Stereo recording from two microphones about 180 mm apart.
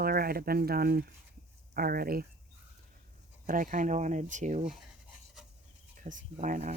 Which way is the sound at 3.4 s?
50° right (ahead or behind).